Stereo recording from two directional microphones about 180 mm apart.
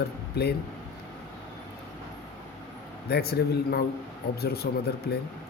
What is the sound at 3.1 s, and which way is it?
Speech, 60° left (ahead or behind).